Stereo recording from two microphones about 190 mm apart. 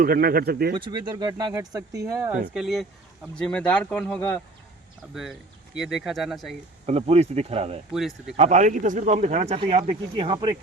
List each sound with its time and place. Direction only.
0.0 s speech: 50° right (ahead or behind)
0.8 s speech: 25° right (ahead or behind)
2.5 s speech: centre (ahead or behind)
5.1 s speech: centre (ahead or behind)
6.8 s speech: 35° right (ahead or behind)
7.9 s speech: centre (ahead or behind)
8.4 s speech: 40° right (ahead or behind); by 10.6 s 25° right (ahead or behind)